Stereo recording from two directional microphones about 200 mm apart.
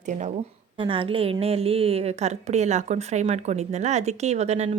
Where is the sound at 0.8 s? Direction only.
25° right (ahead or behind).